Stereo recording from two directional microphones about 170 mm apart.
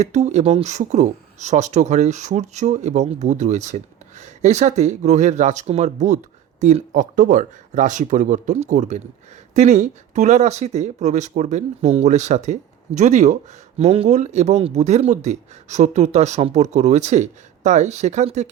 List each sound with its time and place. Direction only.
0.0 s speech: 40° right (ahead or behind)